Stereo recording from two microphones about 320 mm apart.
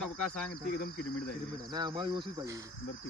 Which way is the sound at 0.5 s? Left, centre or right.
Left.